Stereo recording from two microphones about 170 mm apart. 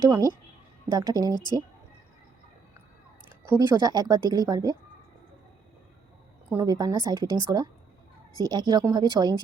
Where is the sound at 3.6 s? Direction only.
20° right (ahead or behind).